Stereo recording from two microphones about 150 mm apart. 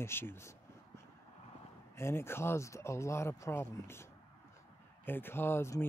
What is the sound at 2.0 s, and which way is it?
Speech, 15° left (ahead or behind).